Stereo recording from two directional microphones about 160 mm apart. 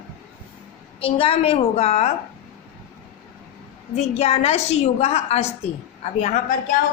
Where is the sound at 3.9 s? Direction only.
45° left (ahead or behind).